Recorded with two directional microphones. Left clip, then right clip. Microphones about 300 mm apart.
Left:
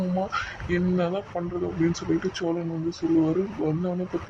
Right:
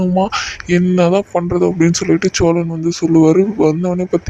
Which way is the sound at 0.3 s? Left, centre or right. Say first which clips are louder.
Right 10 dB; right.